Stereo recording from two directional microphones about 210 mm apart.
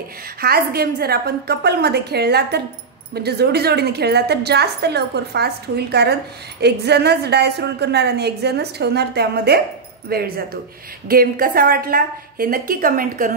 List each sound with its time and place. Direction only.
0.4 s a woman's voice: 45° right (ahead or behind)